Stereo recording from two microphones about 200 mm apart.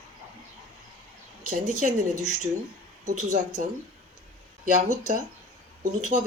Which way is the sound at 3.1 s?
40° right (ahead or behind).